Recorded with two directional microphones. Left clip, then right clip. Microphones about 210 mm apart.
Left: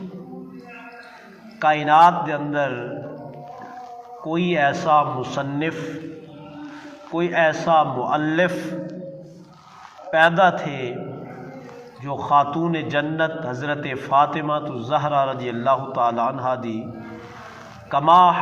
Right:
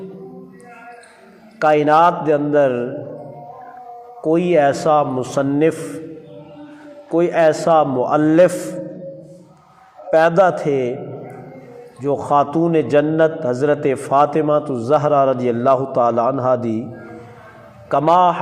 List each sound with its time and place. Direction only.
1.5 s a man's voice: 60° right (ahead or behind)
4.3 s a man's voice: 60° right (ahead or behind)
7.2 s a man's voice: 55° right (ahead or behind)
10.1 s a man's voice: 60° right (ahead or behind)
12.0 s a man's voice: 60° right (ahead or behind)
17.9 s a man's voice: 55° right (ahead or behind)